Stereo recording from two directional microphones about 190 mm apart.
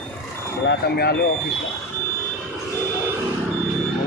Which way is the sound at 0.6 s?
55° left (ahead or behind).